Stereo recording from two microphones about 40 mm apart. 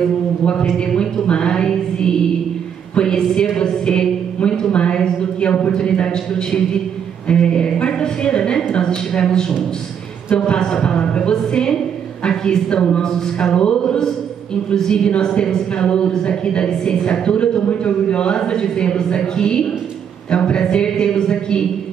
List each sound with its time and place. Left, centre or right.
0.7 s a woman's voice: left
2.9 s a sound: left
3.5 s a woman's voice: centre